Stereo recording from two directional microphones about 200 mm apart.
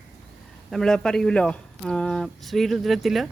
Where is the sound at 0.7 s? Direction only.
Centre (ahead or behind).